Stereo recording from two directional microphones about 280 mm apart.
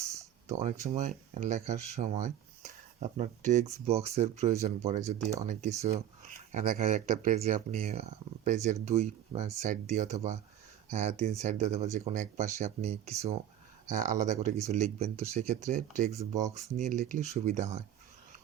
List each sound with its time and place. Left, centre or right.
0.4 s speech: right
6.5 s speech: right